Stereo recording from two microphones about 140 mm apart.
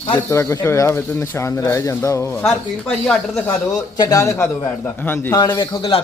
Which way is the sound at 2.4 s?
5° left (ahead or behind).